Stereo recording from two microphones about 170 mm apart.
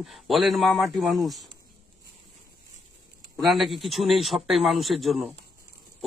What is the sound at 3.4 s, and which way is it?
Speech, centre (ahead or behind).